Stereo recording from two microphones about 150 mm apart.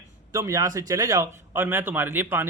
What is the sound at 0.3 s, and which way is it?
A man's voice, 20° right (ahead or behind).